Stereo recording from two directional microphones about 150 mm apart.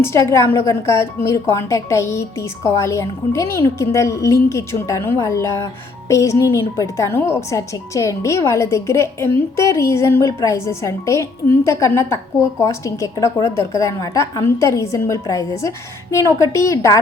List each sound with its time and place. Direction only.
0.0 s a woman's voice: 20° left (ahead or behind)